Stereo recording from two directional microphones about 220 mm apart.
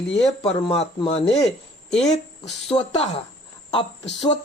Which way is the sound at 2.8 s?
30° left (ahead or behind).